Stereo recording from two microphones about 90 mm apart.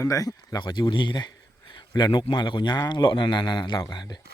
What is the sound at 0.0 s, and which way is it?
Speech, 40° left (ahead or behind).